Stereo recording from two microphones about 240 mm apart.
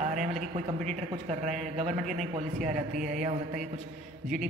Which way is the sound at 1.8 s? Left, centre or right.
Right.